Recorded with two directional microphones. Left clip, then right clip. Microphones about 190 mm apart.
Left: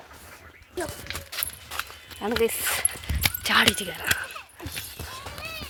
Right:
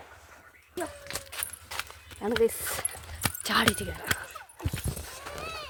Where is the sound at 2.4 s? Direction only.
10° right (ahead or behind).